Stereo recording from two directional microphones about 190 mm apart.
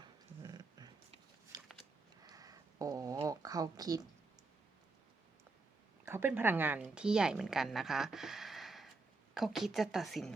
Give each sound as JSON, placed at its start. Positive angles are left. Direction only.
{"t": 0.4, "sound": "dog", "side_deg": -20}
{"t": 1.5, "sound": "biting", "side_deg": -20}
{"t": 2.2, "sound": "a sound", "side_deg": -20}
{"t": 6.1, "sound": "a woman's voice", "side_deg": -10}